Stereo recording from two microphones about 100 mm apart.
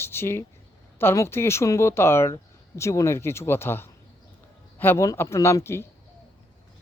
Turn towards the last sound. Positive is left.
turn(degrees=25)  # may be behind; listen again after turning